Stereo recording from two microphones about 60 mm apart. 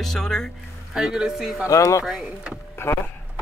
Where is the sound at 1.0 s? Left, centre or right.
Centre.